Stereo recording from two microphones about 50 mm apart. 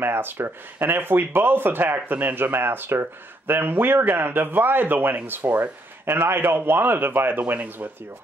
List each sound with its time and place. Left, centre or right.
0.0 s speech: right